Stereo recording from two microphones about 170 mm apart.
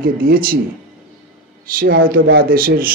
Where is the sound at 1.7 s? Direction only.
55° right (ahead or behind).